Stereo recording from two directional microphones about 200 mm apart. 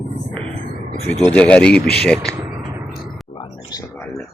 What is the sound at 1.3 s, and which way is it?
Speech, 5° left (ahead or behind).